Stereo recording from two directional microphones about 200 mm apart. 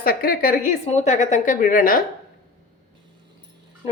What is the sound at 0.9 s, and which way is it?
A woman's voice, 35° left (ahead or behind).